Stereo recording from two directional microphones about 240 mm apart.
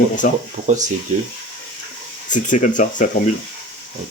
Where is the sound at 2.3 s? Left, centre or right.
Left.